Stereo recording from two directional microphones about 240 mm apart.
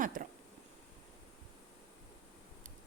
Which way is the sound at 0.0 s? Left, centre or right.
Right.